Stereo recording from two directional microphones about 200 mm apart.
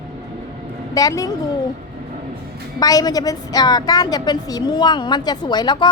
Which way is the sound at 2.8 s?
20° left (ahead or behind).